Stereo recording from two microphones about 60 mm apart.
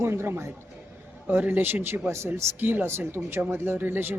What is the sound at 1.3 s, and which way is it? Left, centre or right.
Speech, right.